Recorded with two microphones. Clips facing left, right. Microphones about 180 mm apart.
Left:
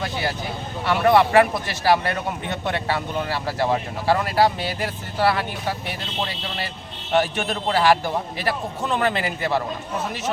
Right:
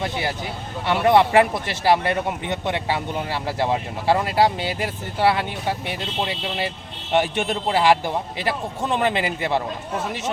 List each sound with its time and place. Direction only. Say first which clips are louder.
0.9 s a man's voice: even; 20° right (ahead or behind)